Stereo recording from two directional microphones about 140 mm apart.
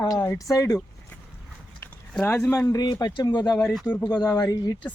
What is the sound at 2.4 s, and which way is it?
Speech, 20° left (ahead or behind).